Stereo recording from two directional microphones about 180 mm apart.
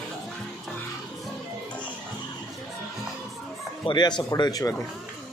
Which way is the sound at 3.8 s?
25° left (ahead or behind).